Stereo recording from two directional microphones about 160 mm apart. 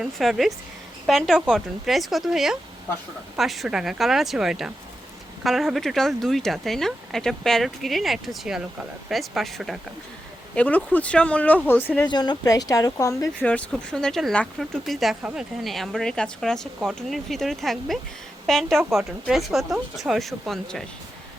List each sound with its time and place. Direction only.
0.0 s speech: centre (ahead or behind)
12.0 s speech: 25° left (ahead or behind)
13.4 s speech: 10° left (ahead or behind)